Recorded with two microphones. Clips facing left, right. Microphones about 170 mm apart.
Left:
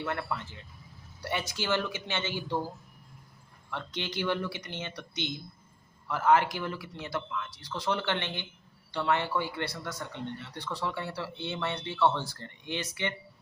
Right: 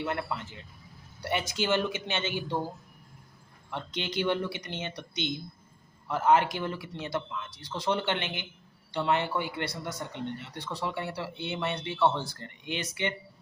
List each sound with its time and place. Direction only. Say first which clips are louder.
0.0 s speech: right 1 dB; 20° right (ahead or behind)